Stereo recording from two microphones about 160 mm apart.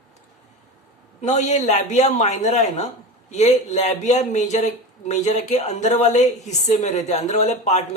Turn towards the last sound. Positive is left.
turn(degrees=45)  # may be behind; listen again after turning